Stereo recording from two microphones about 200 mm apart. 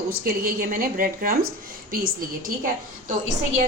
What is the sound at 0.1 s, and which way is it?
A woman's voice, 50° right (ahead or behind).